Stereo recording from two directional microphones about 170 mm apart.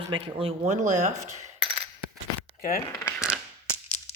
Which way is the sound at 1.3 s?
40° right (ahead or behind).